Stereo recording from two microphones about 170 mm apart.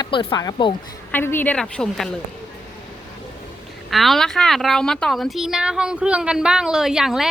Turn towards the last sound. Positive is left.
turn(degrees=0)  # may be behind; listen again after turning